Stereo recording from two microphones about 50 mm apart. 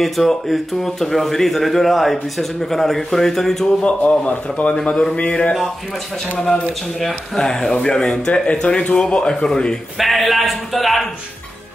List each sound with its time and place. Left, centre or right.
0.0 s speech: centre
3.8 s a man's voice: left
6.3 s speech: centre
9.9 s speech: centre